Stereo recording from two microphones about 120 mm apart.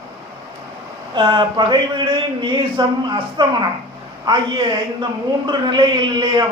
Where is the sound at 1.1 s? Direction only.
40° right (ahead or behind).